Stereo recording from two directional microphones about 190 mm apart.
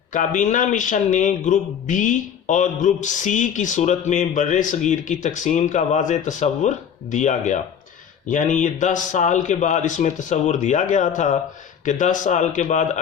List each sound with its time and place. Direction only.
0.1 s a man's voice: 40° left (ahead or behind)